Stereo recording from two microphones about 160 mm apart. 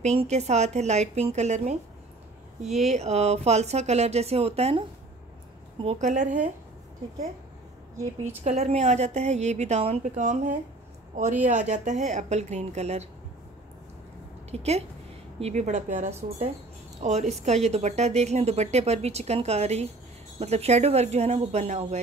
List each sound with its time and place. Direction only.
0.0 s speech: 45° right (ahead or behind)
2.9 s a woman's voice: 40° right (ahead or behind)
8.5 s speech: 45° right (ahead or behind)
14.5 s a woman's voice: 40° right (ahead or behind)